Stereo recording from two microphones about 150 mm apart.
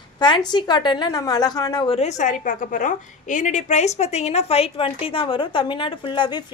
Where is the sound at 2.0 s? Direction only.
55° left (ahead or behind).